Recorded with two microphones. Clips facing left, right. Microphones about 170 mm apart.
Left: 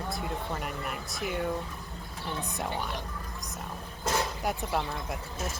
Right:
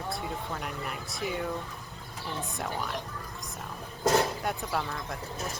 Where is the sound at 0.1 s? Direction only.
Centre (ahead or behind).